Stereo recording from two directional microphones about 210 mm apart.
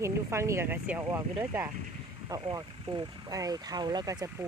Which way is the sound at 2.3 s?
15° right (ahead or behind).